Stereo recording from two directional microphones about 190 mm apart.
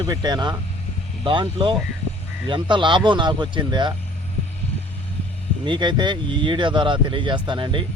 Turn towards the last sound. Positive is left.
turn(degrees=-25)  # may be behind; listen again after turning